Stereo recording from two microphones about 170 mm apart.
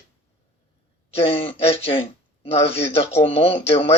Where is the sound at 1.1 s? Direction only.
35° left (ahead or behind).